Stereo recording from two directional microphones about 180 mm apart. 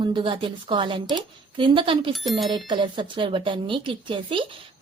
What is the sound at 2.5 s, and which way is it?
A woman's voice, 25° right (ahead or behind).